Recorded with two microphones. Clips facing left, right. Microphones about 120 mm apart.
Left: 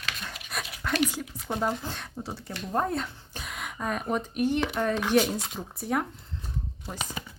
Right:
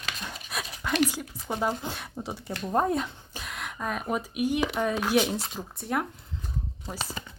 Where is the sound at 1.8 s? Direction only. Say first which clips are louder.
Right 1 dB; 15° right (ahead or behind).